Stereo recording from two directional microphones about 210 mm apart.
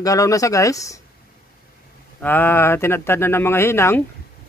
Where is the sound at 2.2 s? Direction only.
10° left (ahead or behind).